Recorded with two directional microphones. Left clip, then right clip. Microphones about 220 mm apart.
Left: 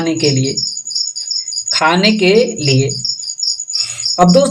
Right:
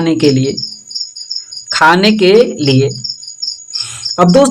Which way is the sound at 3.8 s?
25° right (ahead or behind).